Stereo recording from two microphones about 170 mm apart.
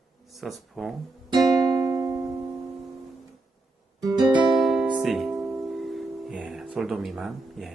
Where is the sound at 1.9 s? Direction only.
15° right (ahead or behind).